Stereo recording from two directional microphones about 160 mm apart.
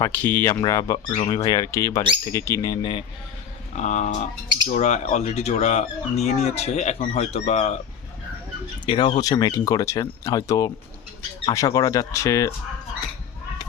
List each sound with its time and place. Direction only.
0.0 s speech: 10° left (ahead or behind); by 3.0 s 30° left (ahead or behind)
3.8 s speech: 50° left (ahead or behind)
8.9 s speech: 30° left (ahead or behind)